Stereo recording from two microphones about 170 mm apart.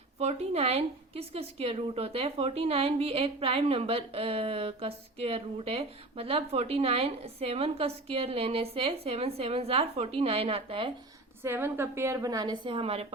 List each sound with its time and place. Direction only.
0.2 s a woman's voice: 40° right (ahead or behind)
11.4 s a woman's voice: 15° right (ahead or behind); by 13.1 s 35° right (ahead or behind)